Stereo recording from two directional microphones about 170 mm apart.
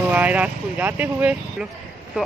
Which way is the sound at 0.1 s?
10° right (ahead or behind).